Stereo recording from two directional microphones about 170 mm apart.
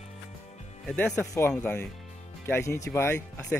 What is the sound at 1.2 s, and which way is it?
Speech, 20° left (ahead or behind).